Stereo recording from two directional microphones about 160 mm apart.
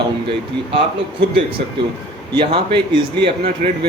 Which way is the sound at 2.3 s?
30° right (ahead or behind).